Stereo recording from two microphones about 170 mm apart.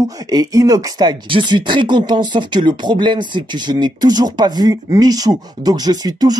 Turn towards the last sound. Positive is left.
turn(degrees=-25)  # may be behind; listen again after turning